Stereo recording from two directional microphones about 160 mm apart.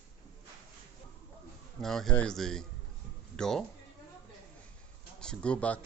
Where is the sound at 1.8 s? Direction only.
Centre (ahead or behind).